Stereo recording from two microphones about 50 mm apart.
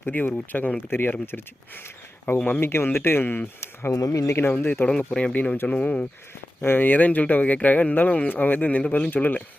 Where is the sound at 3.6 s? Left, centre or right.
Left.